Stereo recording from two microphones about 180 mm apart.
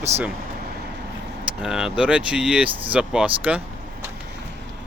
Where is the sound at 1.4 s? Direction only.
5° right (ahead or behind).